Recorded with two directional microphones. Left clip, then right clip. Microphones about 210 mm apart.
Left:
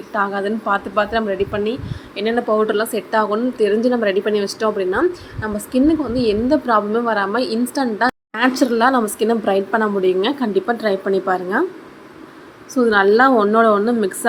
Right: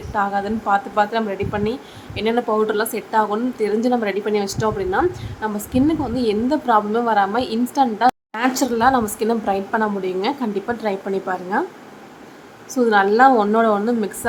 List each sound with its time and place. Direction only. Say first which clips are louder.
0.1 s a woman's voice: left 1 dB; 5° left (ahead or behind)
12.8 s a woman's voice: left 1 dB; 5° left (ahead or behind)